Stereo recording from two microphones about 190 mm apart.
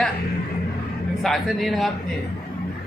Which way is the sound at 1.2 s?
Centre (ahead or behind).